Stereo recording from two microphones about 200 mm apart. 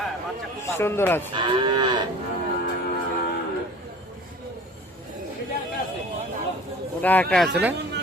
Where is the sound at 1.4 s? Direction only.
25° right (ahead or behind).